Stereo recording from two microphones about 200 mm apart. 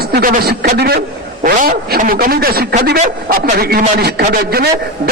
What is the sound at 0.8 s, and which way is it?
A man's voice, 55° right (ahead or behind).